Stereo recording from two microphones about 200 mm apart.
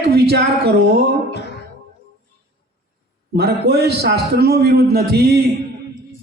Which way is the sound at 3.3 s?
55° right (ahead or behind).